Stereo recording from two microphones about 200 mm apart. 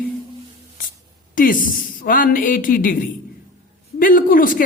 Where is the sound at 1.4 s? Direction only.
45° left (ahead or behind).